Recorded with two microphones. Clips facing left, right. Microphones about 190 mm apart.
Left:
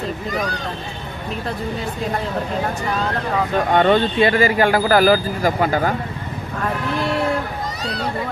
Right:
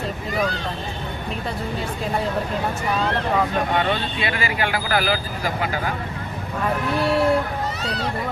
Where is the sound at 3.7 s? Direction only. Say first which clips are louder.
Left 7 dB; 45° left (ahead or behind).